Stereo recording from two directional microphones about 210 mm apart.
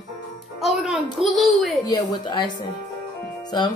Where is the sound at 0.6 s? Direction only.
Centre (ahead or behind).